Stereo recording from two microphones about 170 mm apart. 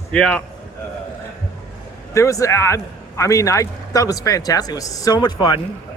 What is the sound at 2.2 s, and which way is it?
Speech, 20° left (ahead or behind).